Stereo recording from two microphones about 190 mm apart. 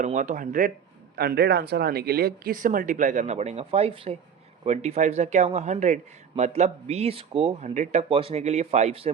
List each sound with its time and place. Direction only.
0.0 s speech: 40° right (ahead or behind)
1.1 s speech: 55° right (ahead or behind); by 9.0 s 35° right (ahead or behind)